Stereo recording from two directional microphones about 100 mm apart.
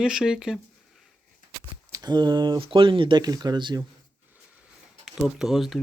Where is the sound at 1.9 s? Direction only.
45° right (ahead or behind).